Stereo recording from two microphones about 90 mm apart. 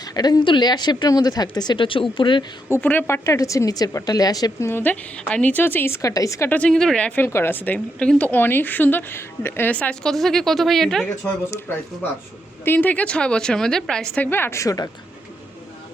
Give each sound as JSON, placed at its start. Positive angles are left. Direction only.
{"t": 0.0, "sound": "a woman's voice", "side_deg": 50}
{"t": 2.7, "sound": "a woman's voice", "side_deg": 30}
{"t": 4.7, "sound": "speech", "side_deg": 20}
{"t": 6.0, "sound": "a woman's voice", "side_deg": 40}
{"t": 6.5, "sound": "a woman's voice", "side_deg": 10}
{"t": 7.2, "sound": "speech", "side_deg": 25}
{"t": 9.7, "sound": "speech", "side_deg": 10}
{"t": 12.6, "sound": "a woman's voice", "side_deg": 20}
{"t": 14.2, "sound": "speech", "side_deg": 25}
{"t": 14.6, "sound": "a woman's voice", "side_deg": 40}